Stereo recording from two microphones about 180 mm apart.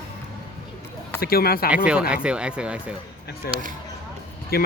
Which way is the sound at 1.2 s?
60° left (ahead or behind).